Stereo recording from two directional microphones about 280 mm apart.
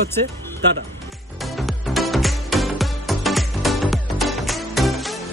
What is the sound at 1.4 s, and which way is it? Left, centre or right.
Music, centre.